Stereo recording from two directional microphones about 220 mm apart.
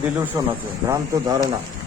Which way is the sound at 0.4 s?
15° right (ahead or behind).